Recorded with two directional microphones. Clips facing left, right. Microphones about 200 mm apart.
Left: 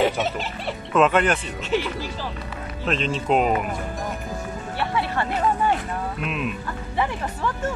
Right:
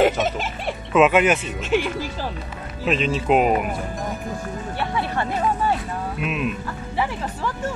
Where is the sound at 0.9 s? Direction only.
5° right (ahead or behind).